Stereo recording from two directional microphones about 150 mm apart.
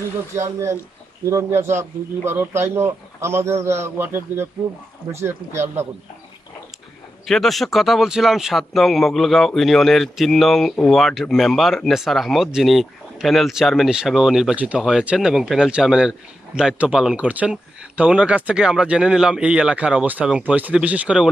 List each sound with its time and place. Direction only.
0.4 s speech: 20° right (ahead or behind)
7.2 s speech: centre (ahead or behind)